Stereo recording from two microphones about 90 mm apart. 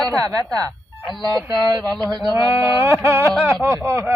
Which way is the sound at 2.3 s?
35° right (ahead or behind).